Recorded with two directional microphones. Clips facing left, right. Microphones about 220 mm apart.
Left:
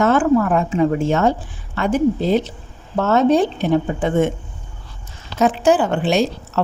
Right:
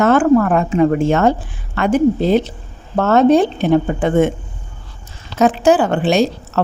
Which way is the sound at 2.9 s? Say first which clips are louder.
Right 3 dB; 60° right (ahead or behind).